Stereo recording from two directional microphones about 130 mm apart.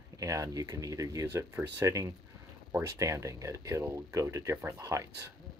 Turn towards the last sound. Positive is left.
turn(degrees=-25)  # may be behind; listen again after turning